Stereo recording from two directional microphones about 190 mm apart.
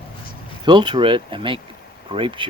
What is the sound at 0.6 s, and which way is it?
Speech, 25° right (ahead or behind).